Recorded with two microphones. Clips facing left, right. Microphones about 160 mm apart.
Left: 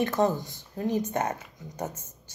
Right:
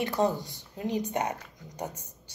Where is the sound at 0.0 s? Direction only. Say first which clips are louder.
Left 2 dB; 15° right (ahead or behind).